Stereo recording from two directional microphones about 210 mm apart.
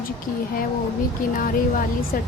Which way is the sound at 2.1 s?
45° left (ahead or behind).